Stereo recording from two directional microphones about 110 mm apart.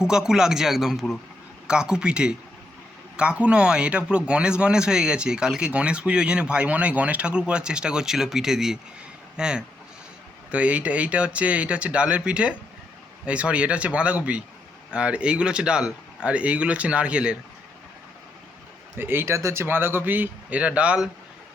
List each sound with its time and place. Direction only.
0.0 s a man's voice: 5° right (ahead or behind)
18.9 s speech: 20° right (ahead or behind)